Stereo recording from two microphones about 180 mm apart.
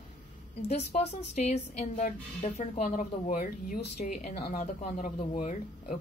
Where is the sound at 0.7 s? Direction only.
35° left (ahead or behind).